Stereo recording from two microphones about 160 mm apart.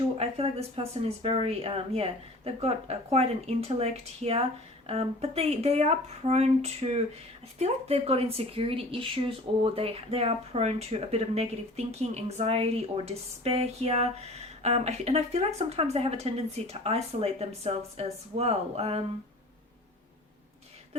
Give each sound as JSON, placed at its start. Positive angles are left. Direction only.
{"t": 0.2, "sound": "a woman's voice", "side_deg": -40}